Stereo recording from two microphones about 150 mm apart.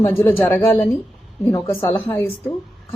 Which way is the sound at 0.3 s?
15° left (ahead or behind).